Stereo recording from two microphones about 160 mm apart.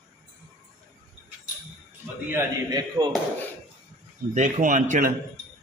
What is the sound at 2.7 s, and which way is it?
Speech, 25° right (ahead or behind).